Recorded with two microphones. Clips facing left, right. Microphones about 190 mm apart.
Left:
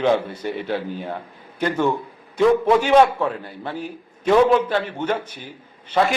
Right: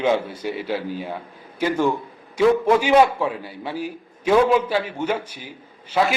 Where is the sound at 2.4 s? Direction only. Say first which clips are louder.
Left 1 dB; 5° right (ahead or behind).